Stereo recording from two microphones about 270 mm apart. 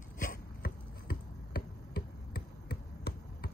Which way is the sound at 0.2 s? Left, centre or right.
Left.